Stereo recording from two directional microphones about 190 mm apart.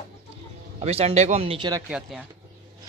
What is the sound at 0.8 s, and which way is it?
Speech, 35° right (ahead or behind).